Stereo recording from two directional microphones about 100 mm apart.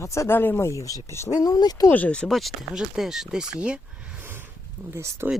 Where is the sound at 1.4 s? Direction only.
40° left (ahead or behind).